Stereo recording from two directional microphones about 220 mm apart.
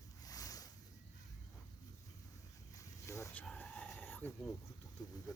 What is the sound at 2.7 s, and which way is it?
Livestock, 15° left (ahead or behind).